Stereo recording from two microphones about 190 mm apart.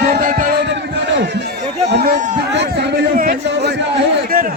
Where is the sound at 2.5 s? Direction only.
65° right (ahead or behind).